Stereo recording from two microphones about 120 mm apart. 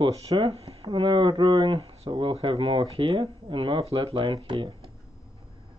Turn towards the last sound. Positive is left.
turn(degrees=-45)  # may be behind; listen again after turning